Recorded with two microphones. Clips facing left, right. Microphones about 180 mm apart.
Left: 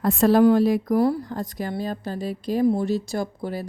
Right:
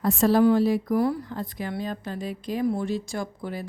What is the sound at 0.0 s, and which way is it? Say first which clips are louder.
A woman's voice: left 3 dB; 55° left (ahead or behind).